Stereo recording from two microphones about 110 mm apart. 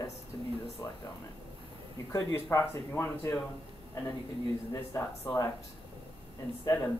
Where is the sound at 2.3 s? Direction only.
20° left (ahead or behind).